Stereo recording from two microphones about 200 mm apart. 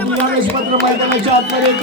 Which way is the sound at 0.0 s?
10° left (ahead or behind).